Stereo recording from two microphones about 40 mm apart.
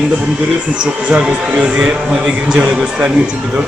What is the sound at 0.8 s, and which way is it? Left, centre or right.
Speech, right.